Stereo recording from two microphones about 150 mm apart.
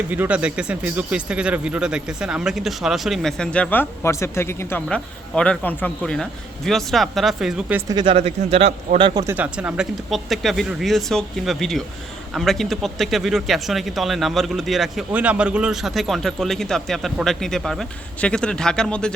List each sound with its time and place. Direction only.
0.1 s speech: 10° right (ahead or behind)
7.9 s speech: 30° right (ahead or behind)
8.1 s a man's voice: 45° right (ahead or behind)
9.2 s speech: 10° right (ahead or behind); by 19.1 s 5° left (ahead or behind)